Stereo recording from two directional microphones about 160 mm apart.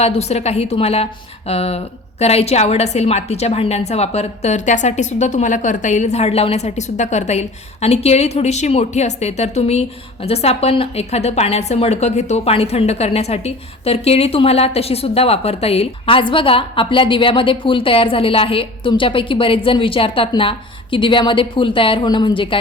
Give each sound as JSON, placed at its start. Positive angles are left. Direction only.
{"t": 0.0, "sound": "a woman's voice", "side_deg": 40}